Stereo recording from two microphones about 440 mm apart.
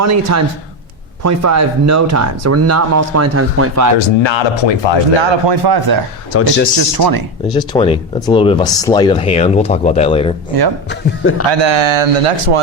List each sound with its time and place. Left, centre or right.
0.0 s speech: right
3.9 s speech: left
5.3 s speech: right
6.3 s a man's voice: left
6.7 s speech: right
7.4 s speech: centre
10.8 s a man's voice: left
11.5 s speech: right